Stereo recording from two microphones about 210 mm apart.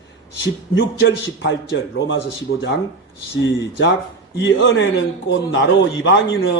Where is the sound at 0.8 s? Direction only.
60° left (ahead or behind).